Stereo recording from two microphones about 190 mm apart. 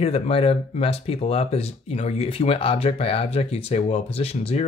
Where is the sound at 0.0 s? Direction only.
30° left (ahead or behind).